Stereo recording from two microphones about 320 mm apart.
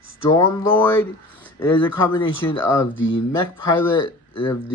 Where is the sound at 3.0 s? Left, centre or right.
Left.